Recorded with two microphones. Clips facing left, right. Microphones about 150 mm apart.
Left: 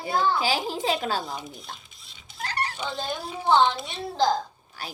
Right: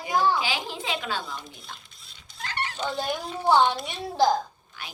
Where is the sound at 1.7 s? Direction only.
Centre (ahead or behind).